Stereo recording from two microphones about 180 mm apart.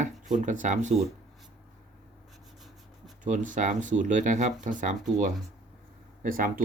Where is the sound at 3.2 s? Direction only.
45° right (ahead or behind).